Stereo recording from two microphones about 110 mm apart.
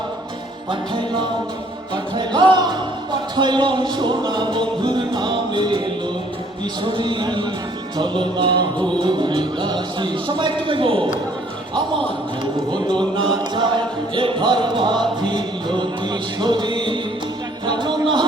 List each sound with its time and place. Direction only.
0.7 s music: 45° right (ahead or behind)
2.1 s speech: 40° right (ahead or behind)
6.8 s music: 45° right (ahead or behind)
16.4 s speech: 45° right (ahead or behind)
17.7 s a sound: 45° right (ahead or behind)